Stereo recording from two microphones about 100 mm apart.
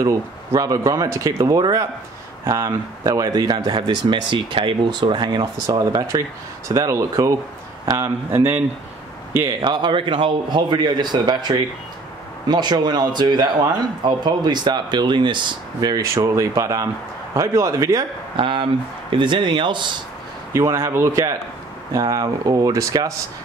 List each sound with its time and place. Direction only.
0.0 s speech: 35° right (ahead or behind)
9.6 s speech: 50° right (ahead or behind)
15.9 s speech: 30° right (ahead or behind)
18.3 s speech: 55° right (ahead or behind)
20.5 s speech: 30° right (ahead or behind)